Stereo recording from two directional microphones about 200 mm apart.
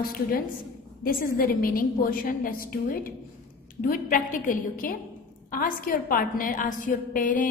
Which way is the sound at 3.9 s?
45° left (ahead or behind).